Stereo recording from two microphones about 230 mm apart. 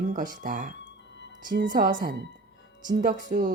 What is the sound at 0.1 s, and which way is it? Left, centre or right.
Speech, right.